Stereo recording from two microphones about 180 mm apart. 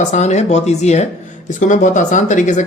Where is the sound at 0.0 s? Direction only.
40° left (ahead or behind).